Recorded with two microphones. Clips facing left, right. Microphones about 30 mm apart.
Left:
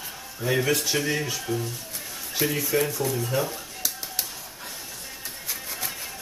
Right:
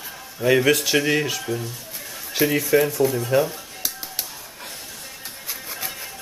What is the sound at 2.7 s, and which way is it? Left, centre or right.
Speech, right.